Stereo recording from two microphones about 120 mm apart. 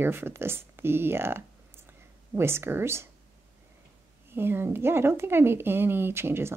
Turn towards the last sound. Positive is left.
turn(degrees=-20)  # may be behind; listen again after turning